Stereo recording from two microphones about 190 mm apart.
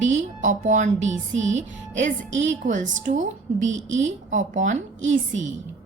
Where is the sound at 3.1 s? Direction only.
40° right (ahead or behind).